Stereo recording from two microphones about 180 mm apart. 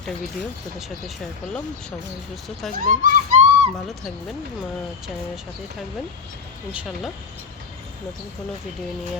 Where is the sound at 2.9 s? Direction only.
45° right (ahead or behind).